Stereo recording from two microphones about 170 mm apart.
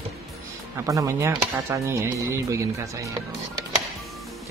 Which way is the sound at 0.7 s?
20° right (ahead or behind).